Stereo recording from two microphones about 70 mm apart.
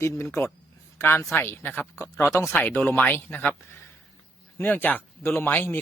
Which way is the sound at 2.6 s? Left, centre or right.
Left.